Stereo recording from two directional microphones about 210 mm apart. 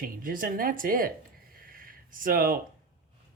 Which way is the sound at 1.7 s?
40° right (ahead or behind).